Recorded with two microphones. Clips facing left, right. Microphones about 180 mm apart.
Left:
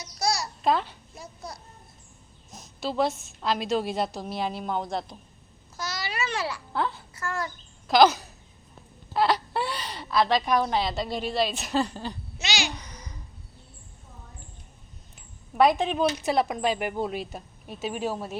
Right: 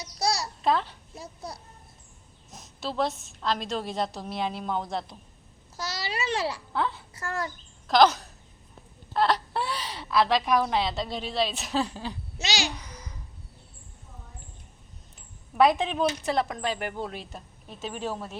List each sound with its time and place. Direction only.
0.0 s babbling: 30° right (ahead or behind)
0.6 s a child's voice: centre (ahead or behind)
1.1 s a child's voice: 30° right (ahead or behind)
2.5 s a woman's voice: centre (ahead or behind)
5.7 s babbling: 30° right (ahead or behind)
6.7 s a child's voice: centre (ahead or behind)
7.2 s a child's voice: 35° right (ahead or behind)
7.9 s a woman's voice: 5° left (ahead or behind)
12.4 s babbling: 40° right (ahead or behind)
12.7 s babbling: 5° right (ahead or behind)
15.5 s speech: centre (ahead or behind)